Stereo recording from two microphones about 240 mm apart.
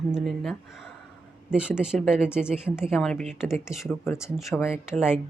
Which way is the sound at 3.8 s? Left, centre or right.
Centre.